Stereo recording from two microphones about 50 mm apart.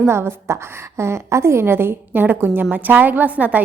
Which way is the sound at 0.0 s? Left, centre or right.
Right.